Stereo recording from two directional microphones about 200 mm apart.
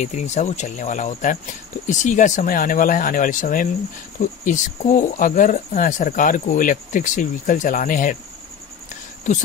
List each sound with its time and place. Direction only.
0.0 s speech: 35° left (ahead or behind)
9.3 s speech: 40° left (ahead or behind)